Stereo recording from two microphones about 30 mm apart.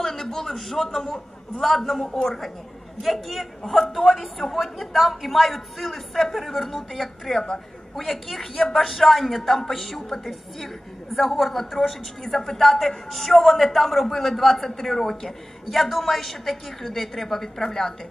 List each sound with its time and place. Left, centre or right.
0.0 s a sound: centre
0.5 s a woman's voice: centre
10.0 s a woman's voice: centre
11.1 s a woman's voice: centre
12.2 s a woman's voice: centre